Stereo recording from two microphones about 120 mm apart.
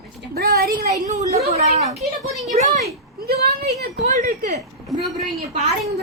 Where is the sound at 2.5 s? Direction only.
85° right.